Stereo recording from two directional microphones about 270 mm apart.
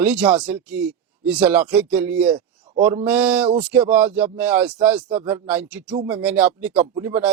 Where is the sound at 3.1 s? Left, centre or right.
Centre.